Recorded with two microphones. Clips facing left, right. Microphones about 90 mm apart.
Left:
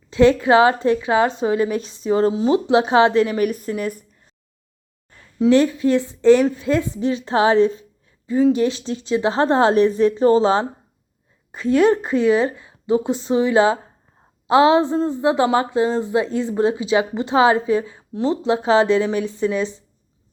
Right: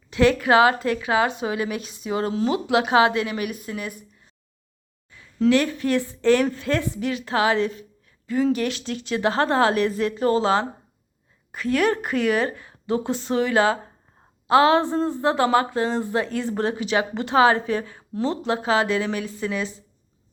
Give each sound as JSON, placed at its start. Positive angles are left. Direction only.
{"t": 0.1, "sound": "a woman's voice", "side_deg": 25}
{"t": 5.1, "sound": "a sound", "side_deg": 45}
{"t": 5.5, "sound": "a woman's voice", "side_deg": 20}